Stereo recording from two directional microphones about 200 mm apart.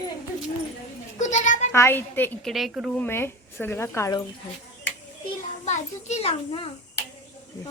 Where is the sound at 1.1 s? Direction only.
35° left (ahead or behind).